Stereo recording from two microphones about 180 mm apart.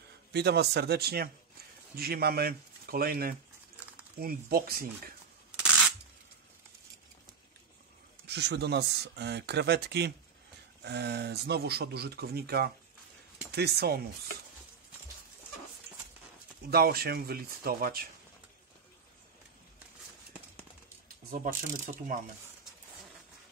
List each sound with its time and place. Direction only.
0.3 s speech: 65° right (ahead or behind)
8.3 s speech: 70° right (ahead or behind)
16.7 s speech: 60° right (ahead or behind)
21.3 s speech: 45° right (ahead or behind)